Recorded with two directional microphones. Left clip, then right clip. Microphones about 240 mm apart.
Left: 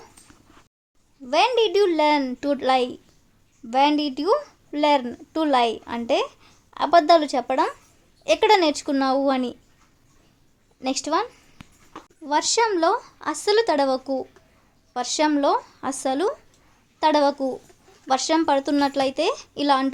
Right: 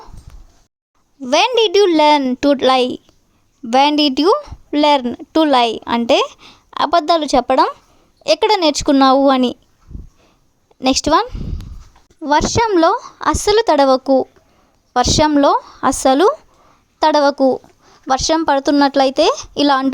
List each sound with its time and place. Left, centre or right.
1.2 s a woman's voice: right
10.8 s a woman's voice: right